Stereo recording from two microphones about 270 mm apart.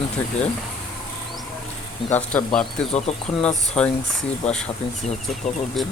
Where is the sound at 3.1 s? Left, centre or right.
Left.